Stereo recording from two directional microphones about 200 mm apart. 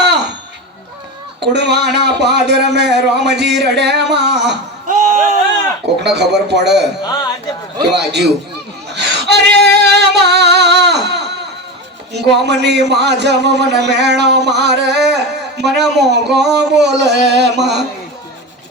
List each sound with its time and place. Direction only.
0.0 s a sound: 60° right (ahead or behind)
1.4 s a man's voice: 55° right (ahead or behind)
4.9 s a sound: 35° right (ahead or behind)
6.0 s a man's voice: 60° right (ahead or behind)
7.9 s a man's voice: 55° right (ahead or behind)
8.9 s singing: 60° right (ahead or behind)
12.1 s a man's voice: 55° right (ahead or behind)